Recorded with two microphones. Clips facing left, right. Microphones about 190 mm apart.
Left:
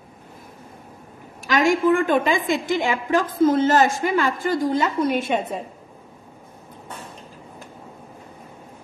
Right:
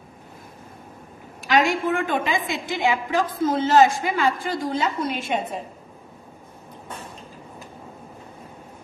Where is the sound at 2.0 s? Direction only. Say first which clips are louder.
Left 5 dB; 45° left (ahead or behind).